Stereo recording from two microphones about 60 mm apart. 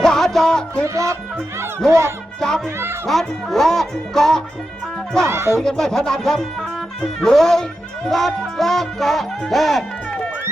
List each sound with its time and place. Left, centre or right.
0.0 s music: centre
0.9 s speech: right
3.1 s speech: centre
5.2 s speech: right
5.5 s speech: centre